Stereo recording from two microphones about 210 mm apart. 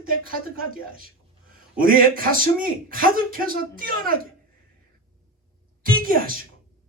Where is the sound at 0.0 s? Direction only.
45° right (ahead or behind).